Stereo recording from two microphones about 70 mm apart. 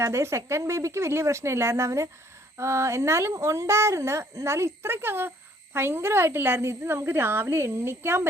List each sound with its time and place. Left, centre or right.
0.0 s a woman's voice: right